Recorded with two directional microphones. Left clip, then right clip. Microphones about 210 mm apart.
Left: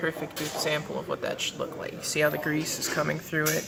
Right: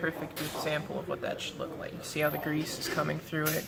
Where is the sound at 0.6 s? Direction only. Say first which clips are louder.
Left 4 dB; 35° left (ahead or behind).